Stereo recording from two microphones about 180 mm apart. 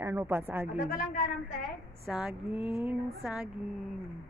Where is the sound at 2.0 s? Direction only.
5° right (ahead or behind).